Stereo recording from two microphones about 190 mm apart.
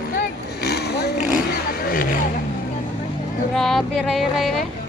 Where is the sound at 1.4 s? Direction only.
50° left (ahead or behind).